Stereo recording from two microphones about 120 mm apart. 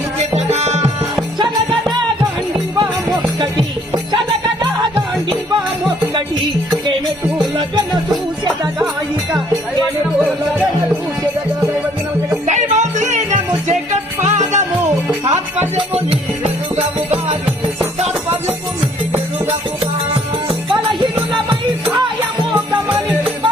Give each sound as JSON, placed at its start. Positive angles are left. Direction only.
{"t": 0.3, "sound": "music", "side_deg": -65}
{"t": 12.5, "sound": "music", "side_deg": -75}
{"t": 14.3, "sound": "music", "side_deg": -80}
{"t": 15.2, "sound": "music", "side_deg": -55}
{"t": 16.7, "sound": "music", "side_deg": -60}
{"t": 21.0, "sound": "music", "side_deg": -45}